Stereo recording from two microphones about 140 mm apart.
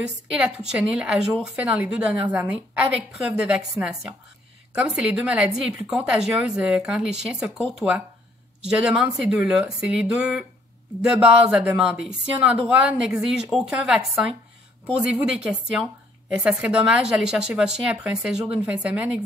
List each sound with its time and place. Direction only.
0.0 s a woman's voice: 5° right (ahead or behind)
8.6 s a woman's voice: 5° right (ahead or behind)